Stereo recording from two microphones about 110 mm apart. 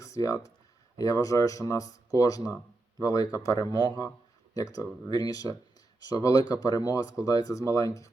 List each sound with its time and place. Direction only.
0.0 s speech: 30° left (ahead or behind)